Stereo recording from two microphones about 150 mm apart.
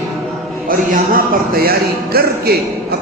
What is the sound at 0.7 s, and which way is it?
Speech, 70° right (ahead or behind).